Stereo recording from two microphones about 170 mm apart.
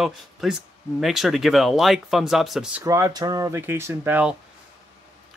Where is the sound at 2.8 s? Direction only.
20° right (ahead or behind).